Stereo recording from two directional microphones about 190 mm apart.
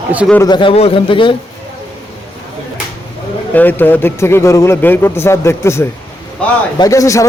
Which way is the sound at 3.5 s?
10° left (ahead or behind).